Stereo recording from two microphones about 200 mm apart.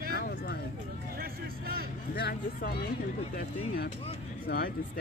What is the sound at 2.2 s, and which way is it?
Speech, 50° left (ahead or behind).